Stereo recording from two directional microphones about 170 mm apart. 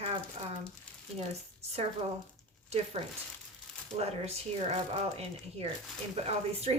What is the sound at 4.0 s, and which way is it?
Speech, 40° right (ahead or behind).